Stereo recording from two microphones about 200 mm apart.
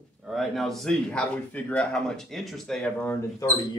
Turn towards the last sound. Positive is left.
turn(degrees=15)  # may be behind; listen again after turning